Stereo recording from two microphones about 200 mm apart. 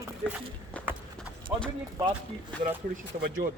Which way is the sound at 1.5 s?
10° right (ahead or behind).